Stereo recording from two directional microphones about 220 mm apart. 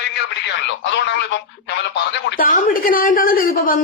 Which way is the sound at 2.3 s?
40° left (ahead or behind).